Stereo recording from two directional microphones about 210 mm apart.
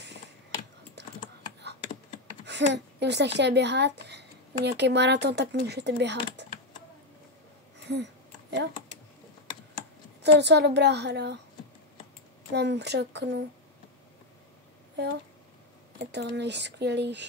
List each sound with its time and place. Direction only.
1.0 s typing: 55° right (ahead or behind)
2.4 s speech: 55° right (ahead or behind)
7.9 s a sound: 55° right (ahead or behind)
10.2 s speech: 55° right (ahead or behind)
12.5 s speech: 55° right (ahead or behind)
16.1 s speech: 55° right (ahead or behind)